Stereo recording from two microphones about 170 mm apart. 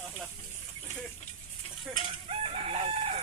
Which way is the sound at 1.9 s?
35° right (ahead or behind).